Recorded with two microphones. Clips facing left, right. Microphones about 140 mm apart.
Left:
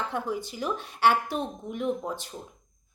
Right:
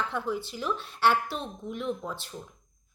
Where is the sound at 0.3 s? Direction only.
15° left (ahead or behind).